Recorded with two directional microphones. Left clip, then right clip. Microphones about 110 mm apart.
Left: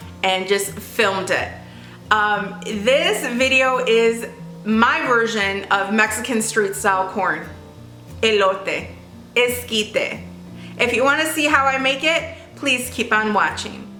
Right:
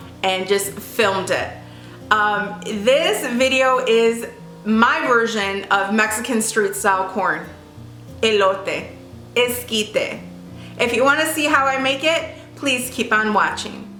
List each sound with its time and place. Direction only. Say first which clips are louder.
0.2 s a woman's voice: even; centre (ahead or behind)